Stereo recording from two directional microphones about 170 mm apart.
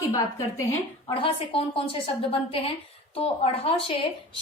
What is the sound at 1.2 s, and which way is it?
A woman's voice, 30° left (ahead or behind).